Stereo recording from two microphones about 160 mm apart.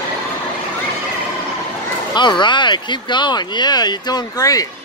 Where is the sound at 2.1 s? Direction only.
30° left (ahead or behind).